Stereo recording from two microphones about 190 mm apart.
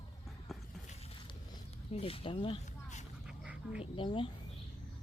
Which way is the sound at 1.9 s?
30° left (ahead or behind).